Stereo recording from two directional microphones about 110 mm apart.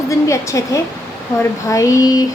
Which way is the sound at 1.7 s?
30° left (ahead or behind).